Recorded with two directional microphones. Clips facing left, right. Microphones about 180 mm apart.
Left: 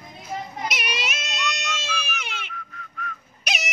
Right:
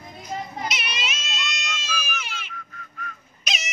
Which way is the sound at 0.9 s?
60° left (ahead or behind).